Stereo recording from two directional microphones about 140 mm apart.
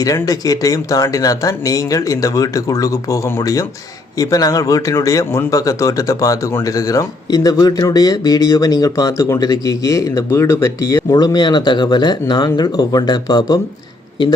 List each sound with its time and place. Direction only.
0.0 s speech: 25° left (ahead or behind)